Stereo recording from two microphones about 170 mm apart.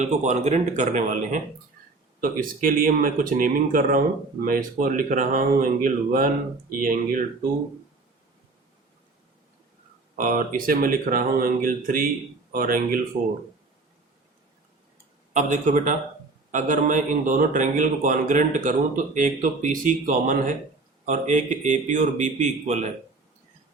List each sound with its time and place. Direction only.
0.0 s speech: 40° right (ahead or behind)
10.2 s speech: 55° right (ahead or behind)
15.3 s speech: 45° right (ahead or behind)